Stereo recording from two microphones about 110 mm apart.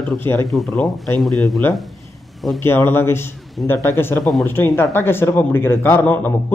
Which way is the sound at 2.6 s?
20° left (ahead or behind).